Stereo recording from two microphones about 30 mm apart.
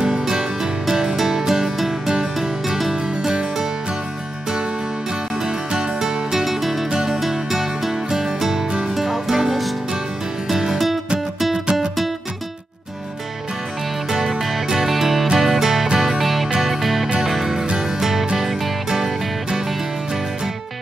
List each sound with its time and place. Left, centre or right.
0.0 s music: right
2.9 s music: right
5.8 s music: centre
6.4 s music: centre
14.1 s music: centre
18.9 s music: centre